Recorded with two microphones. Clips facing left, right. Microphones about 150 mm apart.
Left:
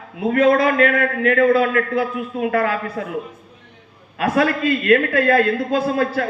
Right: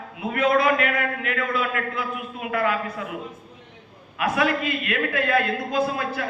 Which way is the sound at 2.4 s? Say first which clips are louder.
Left 3 dB; 45° left (ahead or behind).